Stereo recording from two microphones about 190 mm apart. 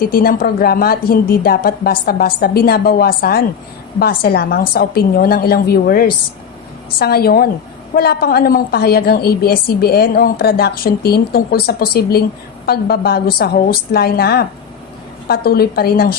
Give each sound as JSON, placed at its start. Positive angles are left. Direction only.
{"t": 0.0, "sound": "a woman's voice", "side_deg": 50}